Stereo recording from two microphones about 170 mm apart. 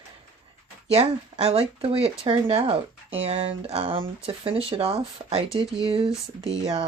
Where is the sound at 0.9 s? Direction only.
35° right (ahead or behind).